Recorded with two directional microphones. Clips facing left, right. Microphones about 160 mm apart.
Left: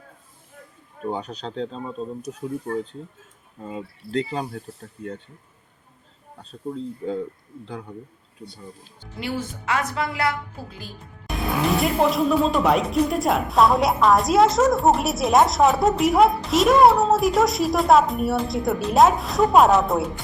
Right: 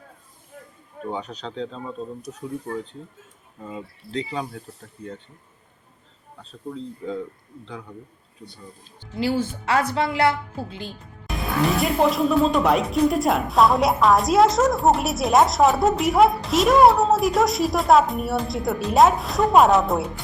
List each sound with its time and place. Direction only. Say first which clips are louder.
1.1 s speech: even; 35° left (ahead or behind)
4.3 s speech: left 1 dB; 40° left (ahead or behind)
6.7 s speech: left 2 dB; 40° left (ahead or behind)
9.1 s a woman's voice: right 6 dB; 30° right (ahead or behind)
11.3 s speech: even; centre (ahead or behind)